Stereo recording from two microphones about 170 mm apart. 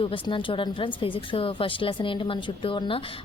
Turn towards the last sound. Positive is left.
turn(degrees=30)  # may be behind; listen again after turning